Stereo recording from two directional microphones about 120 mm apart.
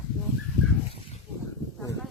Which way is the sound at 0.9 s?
55° left (ahead or behind).